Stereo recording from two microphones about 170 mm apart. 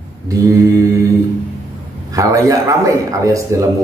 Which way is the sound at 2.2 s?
20° right (ahead or behind).